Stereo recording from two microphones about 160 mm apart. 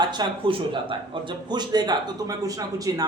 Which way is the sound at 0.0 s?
25° right (ahead or behind).